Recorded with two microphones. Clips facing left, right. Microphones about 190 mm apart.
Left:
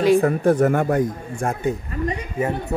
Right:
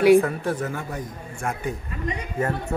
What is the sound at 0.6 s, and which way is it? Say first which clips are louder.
Speech: left 12 dB; 60° left (ahead or behind).